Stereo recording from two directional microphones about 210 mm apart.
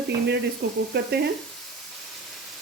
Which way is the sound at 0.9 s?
50° right (ahead or behind).